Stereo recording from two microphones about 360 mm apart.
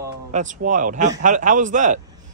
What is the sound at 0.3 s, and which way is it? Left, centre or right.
Speech, right.